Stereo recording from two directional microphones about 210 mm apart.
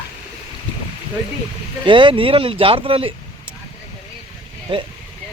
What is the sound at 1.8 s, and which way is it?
Speech, 25° right (ahead or behind).